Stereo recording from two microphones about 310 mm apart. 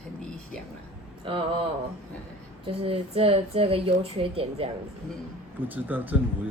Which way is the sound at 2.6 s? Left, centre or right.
Centre.